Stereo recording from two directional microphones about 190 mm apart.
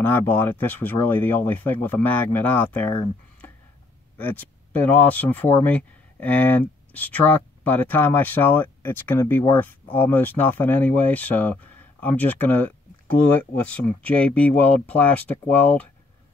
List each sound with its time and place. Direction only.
0.0 s speech: 10° left (ahead or behind)
4.2 s speech: 10° left (ahead or behind)